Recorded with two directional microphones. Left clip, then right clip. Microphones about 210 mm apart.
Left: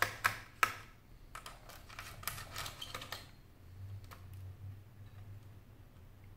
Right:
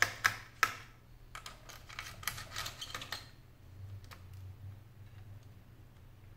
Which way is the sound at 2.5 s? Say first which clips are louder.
Right 2 dB; centre (ahead or behind).